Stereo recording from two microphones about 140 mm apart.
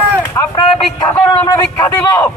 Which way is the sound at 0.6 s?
30° left (ahead or behind).